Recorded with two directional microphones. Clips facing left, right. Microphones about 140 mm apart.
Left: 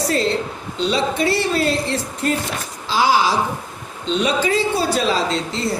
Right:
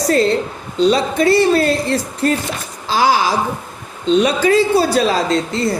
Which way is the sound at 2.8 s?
45° right (ahead or behind).